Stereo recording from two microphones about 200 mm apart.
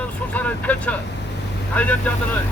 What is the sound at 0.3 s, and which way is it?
Speech, 10° left (ahead or behind).